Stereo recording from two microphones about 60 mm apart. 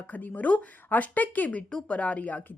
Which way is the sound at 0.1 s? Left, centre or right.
Left.